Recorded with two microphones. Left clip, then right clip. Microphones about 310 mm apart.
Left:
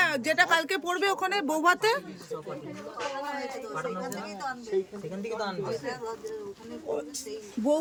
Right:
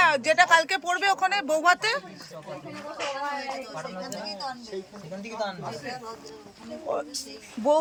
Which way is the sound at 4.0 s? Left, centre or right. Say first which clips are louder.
Right 1 dB; centre.